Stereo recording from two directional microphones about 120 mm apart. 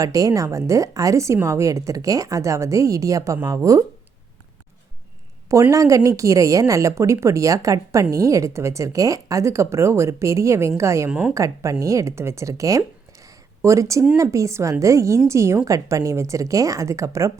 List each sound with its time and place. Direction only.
0.0 s a woman's voice: 30° right (ahead or behind)
5.7 s a woman's voice: 30° right (ahead or behind)
11.1 s a woman's voice: 10° right (ahead or behind)
11.3 s a woman's voice: 25° right (ahead or behind)